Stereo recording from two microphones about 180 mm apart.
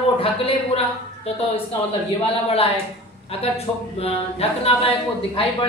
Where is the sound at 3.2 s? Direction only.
35° left (ahead or behind).